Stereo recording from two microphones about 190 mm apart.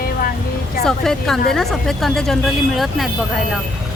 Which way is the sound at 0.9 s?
Centre (ahead or behind).